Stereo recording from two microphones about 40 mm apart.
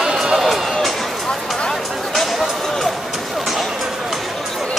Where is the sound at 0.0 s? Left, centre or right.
Centre.